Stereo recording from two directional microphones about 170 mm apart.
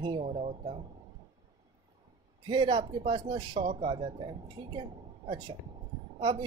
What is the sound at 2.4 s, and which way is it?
Speech, 30° right (ahead or behind).